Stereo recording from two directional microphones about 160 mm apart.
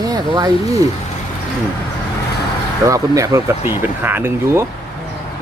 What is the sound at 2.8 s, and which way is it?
Speech, 20° right (ahead or behind).